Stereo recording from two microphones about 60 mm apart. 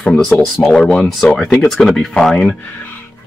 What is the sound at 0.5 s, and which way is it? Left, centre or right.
Speech, centre.